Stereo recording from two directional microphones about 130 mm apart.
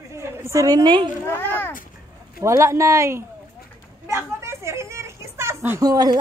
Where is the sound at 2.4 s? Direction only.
25° right (ahead or behind).